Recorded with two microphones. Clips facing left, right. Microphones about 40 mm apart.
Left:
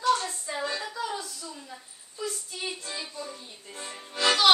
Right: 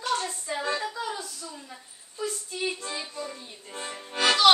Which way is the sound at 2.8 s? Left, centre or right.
Right.